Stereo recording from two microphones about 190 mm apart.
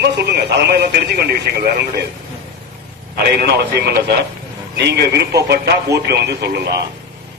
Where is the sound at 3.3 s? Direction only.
60° right (ahead or behind).